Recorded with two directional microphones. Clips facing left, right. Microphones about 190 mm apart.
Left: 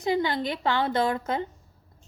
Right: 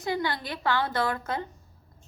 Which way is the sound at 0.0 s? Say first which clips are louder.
Left 4 dB; 20° left (ahead or behind).